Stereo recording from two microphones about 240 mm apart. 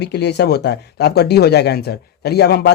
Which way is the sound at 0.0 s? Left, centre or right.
Left.